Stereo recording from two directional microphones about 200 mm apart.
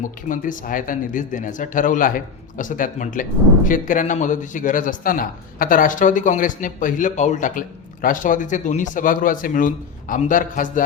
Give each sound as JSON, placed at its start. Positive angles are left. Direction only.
{"t": 0.3, "sound": "speech", "side_deg": 40}